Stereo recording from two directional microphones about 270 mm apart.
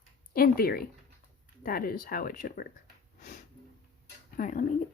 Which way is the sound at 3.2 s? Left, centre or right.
Left.